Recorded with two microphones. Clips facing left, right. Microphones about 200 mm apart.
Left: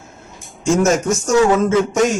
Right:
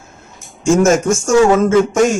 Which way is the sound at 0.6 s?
50° right (ahead or behind).